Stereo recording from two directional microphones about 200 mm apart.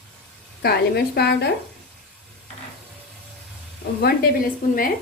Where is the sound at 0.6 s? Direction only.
55° left (ahead or behind).